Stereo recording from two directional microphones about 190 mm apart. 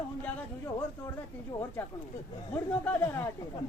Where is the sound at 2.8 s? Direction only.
10° left (ahead or behind).